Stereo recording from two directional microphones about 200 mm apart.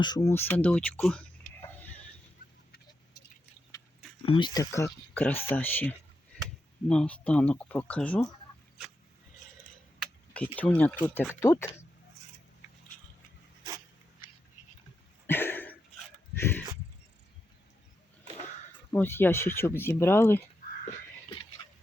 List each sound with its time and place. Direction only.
0.0 s speech: 20° left (ahead or behind)
4.3 s speech: 25° left (ahead or behind); by 8.3 s 5° left (ahead or behind)
10.0 s speech: 5° left (ahead or behind)
15.3 s a sound: 10° left (ahead or behind)
18.9 s speech: 10° left (ahead or behind)